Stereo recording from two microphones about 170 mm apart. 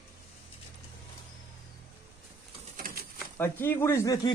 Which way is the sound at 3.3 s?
15° left (ahead or behind).